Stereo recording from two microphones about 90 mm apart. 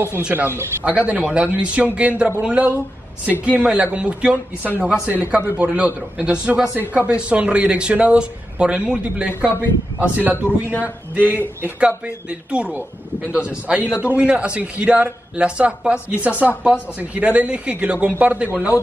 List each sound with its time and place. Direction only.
0.2 s a man's voice: 20° right (ahead or behind)
13.8 s a man's voice: 25° left (ahead or behind)
14.1 s a man's voice: 15° right (ahead or behind)